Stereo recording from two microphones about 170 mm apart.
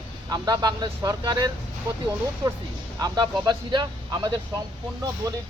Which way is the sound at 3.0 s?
25° right (ahead or behind).